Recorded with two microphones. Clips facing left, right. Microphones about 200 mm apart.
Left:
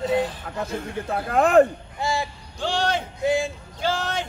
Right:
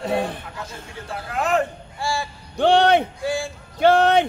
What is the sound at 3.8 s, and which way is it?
Speech, 60° right (ahead or behind).